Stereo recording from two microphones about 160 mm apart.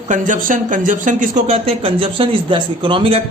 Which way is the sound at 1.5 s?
35° right (ahead or behind).